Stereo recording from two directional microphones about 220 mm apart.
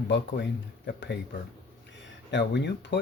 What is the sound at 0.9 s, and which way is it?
Speech, 50° left (ahead or behind).